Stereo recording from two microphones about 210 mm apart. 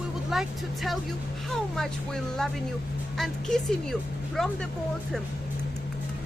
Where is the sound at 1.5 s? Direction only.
Centre (ahead or behind).